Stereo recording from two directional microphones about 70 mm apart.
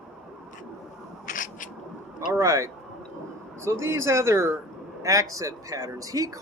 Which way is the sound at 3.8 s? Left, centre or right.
Right.